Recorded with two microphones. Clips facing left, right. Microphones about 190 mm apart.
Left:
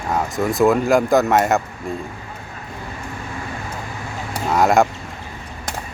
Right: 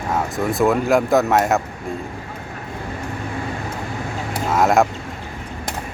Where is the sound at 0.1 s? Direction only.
Centre (ahead or behind).